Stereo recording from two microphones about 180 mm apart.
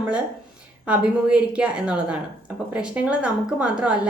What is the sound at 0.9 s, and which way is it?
A woman's voice, 5° right (ahead or behind).